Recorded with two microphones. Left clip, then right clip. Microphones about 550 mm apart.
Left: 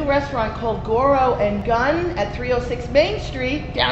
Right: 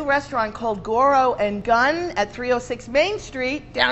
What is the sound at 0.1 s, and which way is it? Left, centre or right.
A woman's voice, right.